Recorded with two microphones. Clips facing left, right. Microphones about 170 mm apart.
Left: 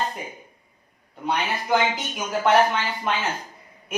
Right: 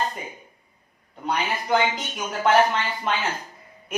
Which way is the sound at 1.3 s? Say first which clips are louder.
Even; centre (ahead or behind).